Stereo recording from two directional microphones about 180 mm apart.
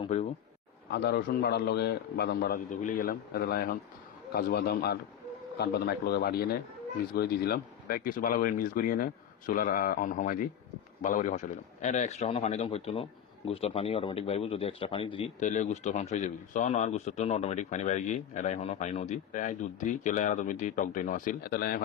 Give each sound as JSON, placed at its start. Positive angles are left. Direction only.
{"t": 0.0, "sound": "a man's voice", "side_deg": 35}
{"t": 0.9, "sound": "a man's voice", "side_deg": 65}
{"t": 15.4, "sound": "a man's voice", "side_deg": 40}